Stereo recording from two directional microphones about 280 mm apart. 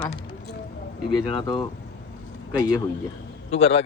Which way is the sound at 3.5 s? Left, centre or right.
Left.